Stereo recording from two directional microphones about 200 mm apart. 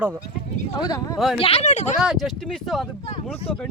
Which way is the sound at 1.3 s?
30° left (ahead or behind).